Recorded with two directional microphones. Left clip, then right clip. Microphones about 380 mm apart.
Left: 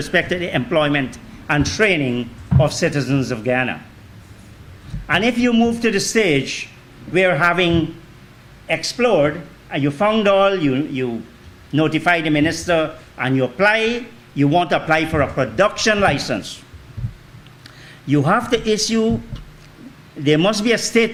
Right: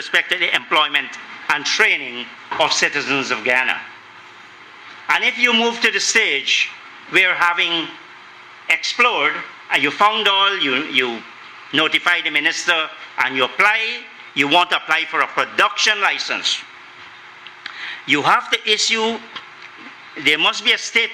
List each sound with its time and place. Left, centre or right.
0.1 s a man's voice: left
5.0 s a man's voice: left
8.6 s a man's voice: left
18.1 s a man's voice: left
20.2 s a man's voice: left